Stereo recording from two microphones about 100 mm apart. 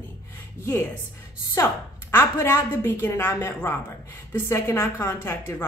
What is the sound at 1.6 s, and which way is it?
A woman's voice, 30° left (ahead or behind).